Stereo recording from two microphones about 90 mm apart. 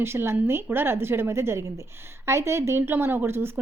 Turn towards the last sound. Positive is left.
turn(degrees=-25)  # may be behind; listen again after turning